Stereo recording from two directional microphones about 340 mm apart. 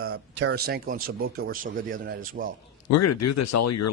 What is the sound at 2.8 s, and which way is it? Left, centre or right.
Speech, left.